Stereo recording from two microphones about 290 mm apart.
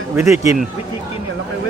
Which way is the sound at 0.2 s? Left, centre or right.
Centre.